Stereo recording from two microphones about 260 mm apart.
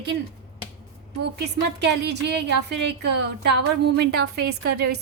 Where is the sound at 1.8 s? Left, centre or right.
Right.